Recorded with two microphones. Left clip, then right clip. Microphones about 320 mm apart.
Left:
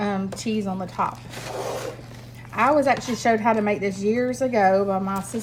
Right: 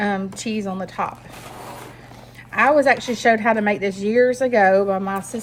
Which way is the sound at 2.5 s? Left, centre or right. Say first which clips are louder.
Right 4 dB; right.